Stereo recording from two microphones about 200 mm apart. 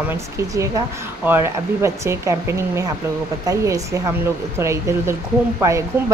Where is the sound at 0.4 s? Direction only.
15° right (ahead or behind).